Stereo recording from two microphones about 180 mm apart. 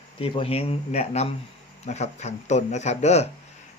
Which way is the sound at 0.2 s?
30° left (ahead or behind).